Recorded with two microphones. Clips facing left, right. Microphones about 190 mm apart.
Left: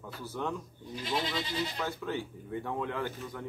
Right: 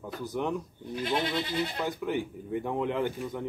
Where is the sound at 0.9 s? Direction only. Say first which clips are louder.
Right 4 dB; 60° right (ahead or behind).